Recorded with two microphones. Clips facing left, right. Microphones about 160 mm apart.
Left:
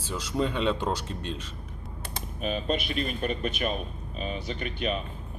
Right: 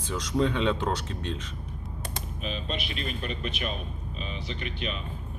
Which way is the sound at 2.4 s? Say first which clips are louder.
Left 6 dB; 45° left (ahead or behind).